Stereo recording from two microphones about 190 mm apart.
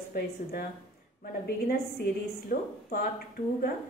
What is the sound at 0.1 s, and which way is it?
Speech, 50° left (ahead or behind).